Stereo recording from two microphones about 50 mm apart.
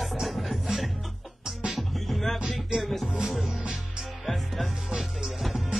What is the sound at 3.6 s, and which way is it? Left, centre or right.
Music, right.